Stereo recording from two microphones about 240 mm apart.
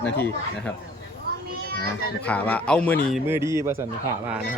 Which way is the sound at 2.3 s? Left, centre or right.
Centre.